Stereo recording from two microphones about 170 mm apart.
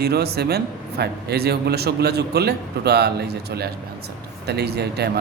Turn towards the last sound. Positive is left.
turn(degrees=-70)  # may be behind; listen again after turning